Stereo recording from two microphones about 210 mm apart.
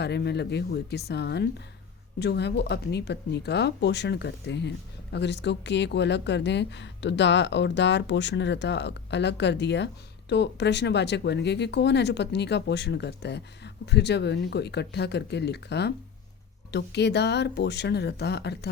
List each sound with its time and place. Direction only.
0.0 s speech: 55° left (ahead or behind)